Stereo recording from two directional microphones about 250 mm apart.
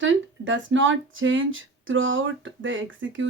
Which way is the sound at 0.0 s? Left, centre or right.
Right.